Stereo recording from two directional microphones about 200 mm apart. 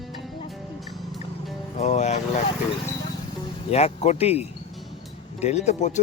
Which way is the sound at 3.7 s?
30° left (ahead or behind).